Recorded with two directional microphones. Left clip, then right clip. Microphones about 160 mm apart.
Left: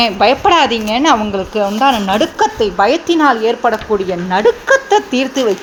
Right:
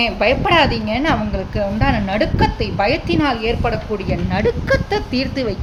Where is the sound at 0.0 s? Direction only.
20° left (ahead or behind).